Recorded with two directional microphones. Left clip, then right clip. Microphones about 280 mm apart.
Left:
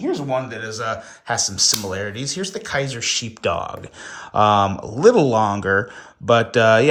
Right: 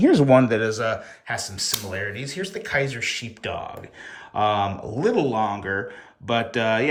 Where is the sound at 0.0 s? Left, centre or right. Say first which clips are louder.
Right 7 dB; right.